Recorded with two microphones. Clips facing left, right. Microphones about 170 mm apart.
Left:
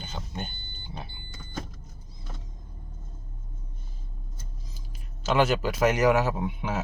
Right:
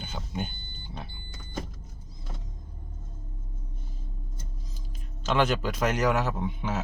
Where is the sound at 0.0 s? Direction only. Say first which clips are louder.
Right 2 dB; 5° right (ahead or behind).